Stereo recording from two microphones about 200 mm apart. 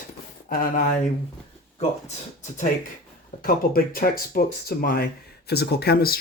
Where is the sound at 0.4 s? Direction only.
45° left (ahead or behind).